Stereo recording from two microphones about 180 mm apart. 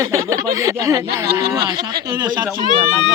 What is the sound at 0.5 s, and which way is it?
Speech, 20° right (ahead or behind).